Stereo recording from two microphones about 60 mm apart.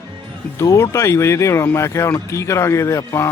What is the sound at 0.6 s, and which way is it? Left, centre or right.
Speech, left.